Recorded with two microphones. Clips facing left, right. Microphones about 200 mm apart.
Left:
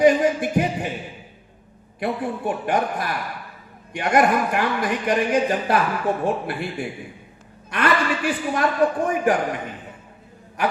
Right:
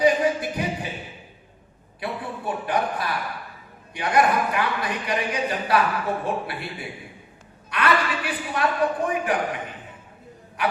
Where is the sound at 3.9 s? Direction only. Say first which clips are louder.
Left 2 dB; 45° left (ahead or behind).